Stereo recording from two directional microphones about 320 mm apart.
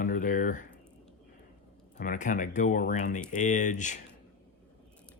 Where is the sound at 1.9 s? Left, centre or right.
Left.